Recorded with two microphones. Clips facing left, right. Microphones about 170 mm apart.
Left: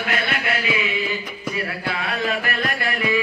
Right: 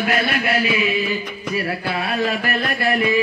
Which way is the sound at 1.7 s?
25° right (ahead or behind).